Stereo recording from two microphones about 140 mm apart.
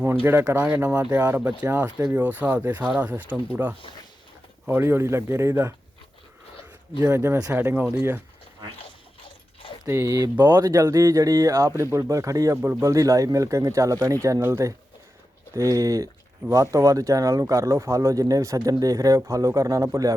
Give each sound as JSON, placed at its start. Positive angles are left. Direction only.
{"t": 0.3, "sound": "speech", "side_deg": -20}
{"t": 1.9, "sound": "speech", "side_deg": -25}
{"t": 2.1, "sound": "speech", "side_deg": -10}
{"t": 7.0, "sound": "speech", "side_deg": -20}
{"t": 9.8, "sound": "speech", "side_deg": -20}